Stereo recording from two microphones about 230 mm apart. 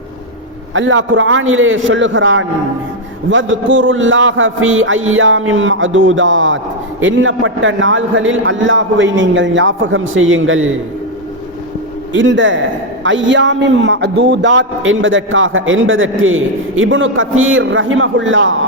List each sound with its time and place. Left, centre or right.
0.7 s a man's voice: right
12.1 s a man's voice: right